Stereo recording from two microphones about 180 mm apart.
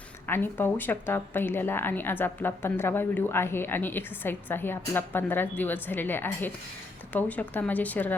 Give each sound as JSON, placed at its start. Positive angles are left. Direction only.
{"t": 0.3, "sound": "speech", "side_deg": 10}